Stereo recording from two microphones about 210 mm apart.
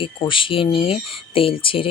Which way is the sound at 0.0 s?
25° left (ahead or behind).